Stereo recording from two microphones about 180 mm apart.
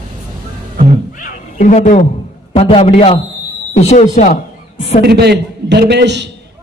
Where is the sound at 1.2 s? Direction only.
45° left (ahead or behind).